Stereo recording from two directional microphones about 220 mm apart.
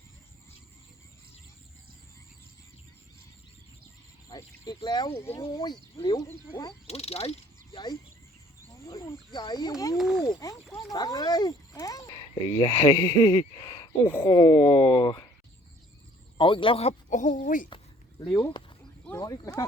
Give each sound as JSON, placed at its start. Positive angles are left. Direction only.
{"t": 4.3, "sound": "speech", "side_deg": 15}
{"t": 6.8, "sound": "speech", "side_deg": 30}
{"t": 10.0, "sound": "speech", "side_deg": 0}
{"t": 10.2, "sound": "speech", "side_deg": 15}
{"t": 16.4, "sound": "speech", "side_deg": 25}
{"t": 18.2, "sound": "speech", "side_deg": 15}